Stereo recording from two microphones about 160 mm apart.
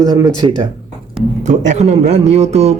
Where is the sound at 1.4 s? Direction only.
45° right (ahead or behind).